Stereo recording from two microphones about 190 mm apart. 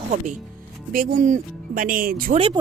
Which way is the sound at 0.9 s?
45° right (ahead or behind).